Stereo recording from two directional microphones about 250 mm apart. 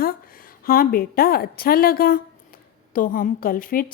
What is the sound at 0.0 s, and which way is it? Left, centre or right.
A woman's voice, left.